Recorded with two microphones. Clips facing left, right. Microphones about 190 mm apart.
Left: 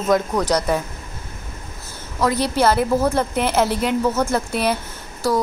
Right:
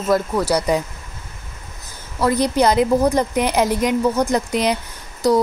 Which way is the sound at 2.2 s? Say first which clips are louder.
Right 2 dB; 15° right (ahead or behind).